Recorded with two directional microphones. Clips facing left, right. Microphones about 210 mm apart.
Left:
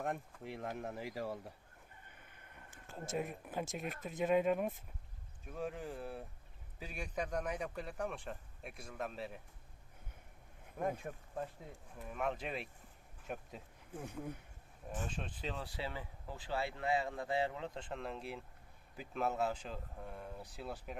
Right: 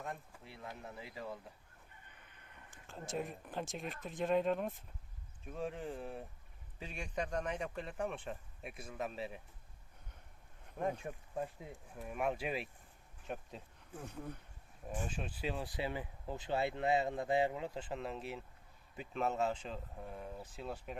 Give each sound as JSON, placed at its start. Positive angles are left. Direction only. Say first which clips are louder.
{"t": 0.6, "sound": "speech", "louder": "left 5 dB", "side_deg": 50}
{"t": 3.2, "sound": "a man's voice", "louder": "left 1 dB", "side_deg": 5}
{"t": 10.8, "sound": "speech", "louder": "right 1 dB", "side_deg": 0}
{"t": 13.2, "sound": "speech", "louder": "right 1 dB", "side_deg": 5}
{"t": 14.8, "sound": "a man's voice", "louder": "right 1 dB", "side_deg": -10}